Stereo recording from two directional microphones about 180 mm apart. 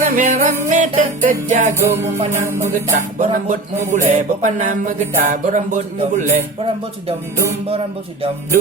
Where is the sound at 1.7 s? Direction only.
15° right (ahead or behind).